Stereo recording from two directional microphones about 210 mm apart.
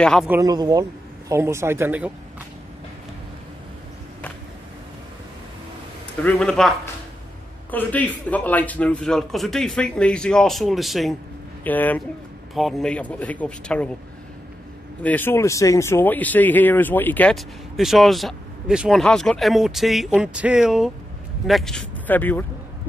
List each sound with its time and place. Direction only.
0.0 s speech: centre (ahead or behind)
0.3 s speech: 15° right (ahead or behind)
6.2 s speech: 5° left (ahead or behind)
7.7 s speech: 5° left (ahead or behind)
15.0 s speech: 10° left (ahead or behind)